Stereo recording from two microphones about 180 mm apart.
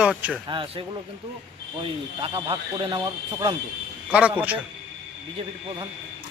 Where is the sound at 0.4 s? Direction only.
30° right (ahead or behind).